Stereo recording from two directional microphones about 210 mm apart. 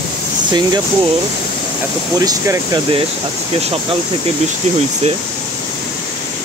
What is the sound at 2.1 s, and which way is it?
Speech, 15° right (ahead or behind).